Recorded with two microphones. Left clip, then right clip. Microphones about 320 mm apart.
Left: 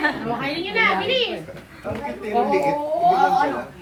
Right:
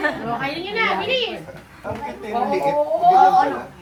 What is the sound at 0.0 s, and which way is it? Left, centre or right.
Speech, centre.